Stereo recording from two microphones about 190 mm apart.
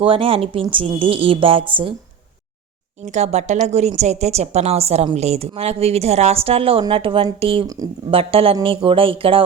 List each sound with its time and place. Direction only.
0.0 s a woman's voice: 30° right (ahead or behind)
3.1 s a woman's voice: 35° right (ahead or behind)